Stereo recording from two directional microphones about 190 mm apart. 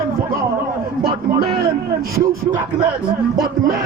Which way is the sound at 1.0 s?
55° right (ahead or behind).